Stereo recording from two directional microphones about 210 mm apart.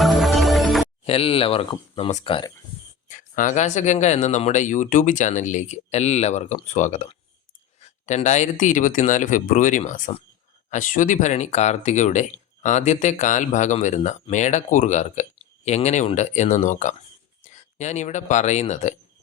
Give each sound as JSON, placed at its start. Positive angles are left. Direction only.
{"t": 0.0, "sound": "music", "side_deg": 0}
{"t": 1.0, "sound": "speech", "side_deg": 25}
{"t": 3.1, "sound": "speech", "side_deg": 40}